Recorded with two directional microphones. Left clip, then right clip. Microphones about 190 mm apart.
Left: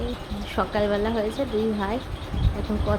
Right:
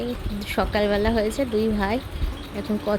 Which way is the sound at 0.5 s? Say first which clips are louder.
Right 2 dB; 25° right (ahead or behind).